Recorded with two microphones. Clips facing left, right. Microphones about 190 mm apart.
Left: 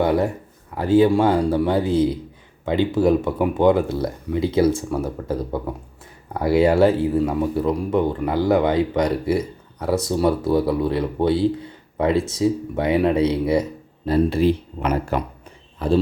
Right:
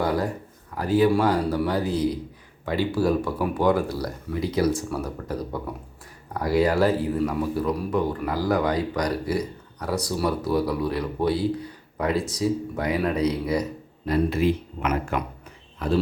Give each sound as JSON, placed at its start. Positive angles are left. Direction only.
{"t": 0.0, "sound": "a man's voice", "side_deg": 25}